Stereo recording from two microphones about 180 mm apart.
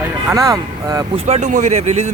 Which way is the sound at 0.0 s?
15° right (ahead or behind).